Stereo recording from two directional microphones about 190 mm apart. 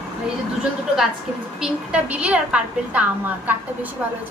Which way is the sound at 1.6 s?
5° right (ahead or behind).